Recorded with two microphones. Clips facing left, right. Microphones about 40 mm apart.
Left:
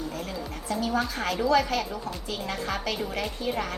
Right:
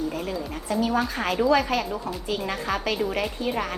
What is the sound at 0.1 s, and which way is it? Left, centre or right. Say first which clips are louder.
A woman's voice: right 4 dB; centre.